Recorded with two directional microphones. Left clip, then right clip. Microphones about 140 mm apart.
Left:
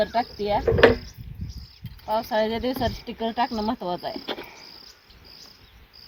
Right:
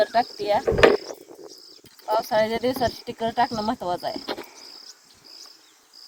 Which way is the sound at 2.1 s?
65° right (ahead or behind).